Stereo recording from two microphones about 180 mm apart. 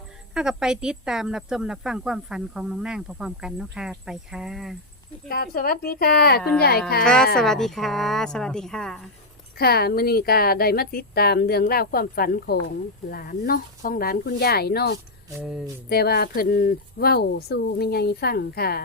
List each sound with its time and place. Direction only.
0.3 s speech: 5° right (ahead or behind)
5.3 s a woman's voice: 55° left (ahead or behind)
7.0 s speech: 5° left (ahead or behind)
9.6 s a woman's voice: 60° left (ahead or behind)